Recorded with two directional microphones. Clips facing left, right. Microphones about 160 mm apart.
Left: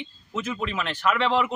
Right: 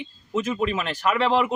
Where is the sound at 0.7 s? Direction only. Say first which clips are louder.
Right 2 dB; 40° right (ahead or behind).